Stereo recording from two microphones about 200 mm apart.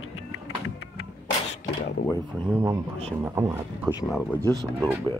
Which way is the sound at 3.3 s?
10° right (ahead or behind).